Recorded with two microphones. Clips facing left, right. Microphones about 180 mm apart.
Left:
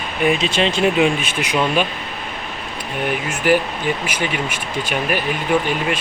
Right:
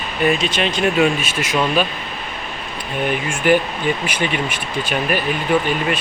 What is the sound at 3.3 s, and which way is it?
Speech, 5° left (ahead or behind).